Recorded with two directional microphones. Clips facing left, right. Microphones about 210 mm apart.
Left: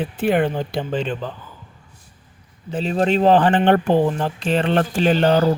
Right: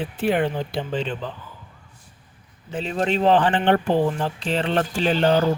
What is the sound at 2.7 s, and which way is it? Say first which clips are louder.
Speech: left 4 dB; 35° left (ahead or behind).